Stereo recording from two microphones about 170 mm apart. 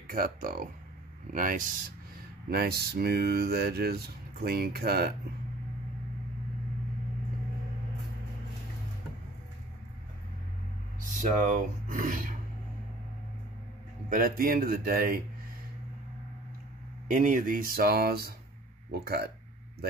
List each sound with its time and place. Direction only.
0.0 s speech: 55° right (ahead or behind)
2.5 s speech: 65° right (ahead or behind)
11.0 s speech: 50° right (ahead or behind)
14.1 s speech: 55° right (ahead or behind)
17.1 s speech: 50° right (ahead or behind); by 19.3 s 70° right (ahead or behind)